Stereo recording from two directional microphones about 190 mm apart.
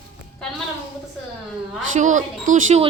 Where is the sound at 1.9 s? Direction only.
40° right (ahead or behind).